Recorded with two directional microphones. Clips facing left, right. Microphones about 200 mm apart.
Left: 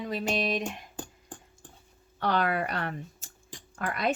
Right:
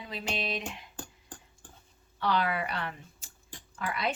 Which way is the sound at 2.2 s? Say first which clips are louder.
Left 2 dB; 50° left (ahead or behind).